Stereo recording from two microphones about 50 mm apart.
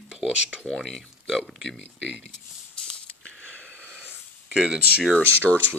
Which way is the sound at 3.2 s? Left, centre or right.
Left.